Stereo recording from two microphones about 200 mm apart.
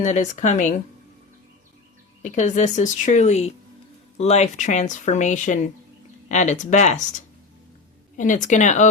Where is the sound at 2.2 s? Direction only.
35° left (ahead or behind).